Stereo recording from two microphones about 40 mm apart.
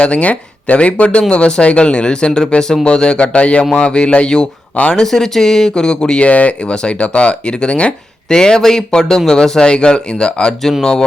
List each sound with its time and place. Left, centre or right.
0.0 s speech: left
5.0 s speech: centre
6.1 s speech: left
10.6 s speech: centre